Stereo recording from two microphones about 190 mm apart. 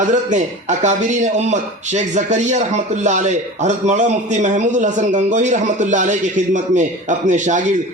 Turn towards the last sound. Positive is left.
turn(degrees=-40)  # may be behind; listen again after turning